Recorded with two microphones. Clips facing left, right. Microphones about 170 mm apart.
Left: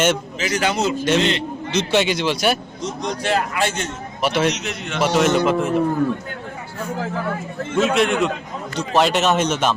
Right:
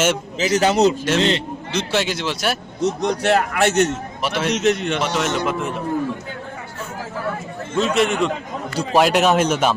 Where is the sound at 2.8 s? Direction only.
60° right (ahead or behind).